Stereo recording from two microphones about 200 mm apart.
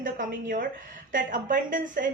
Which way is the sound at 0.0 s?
45° right (ahead or behind).